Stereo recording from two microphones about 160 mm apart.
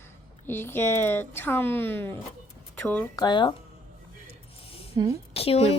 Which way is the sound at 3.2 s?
25° left (ahead or behind).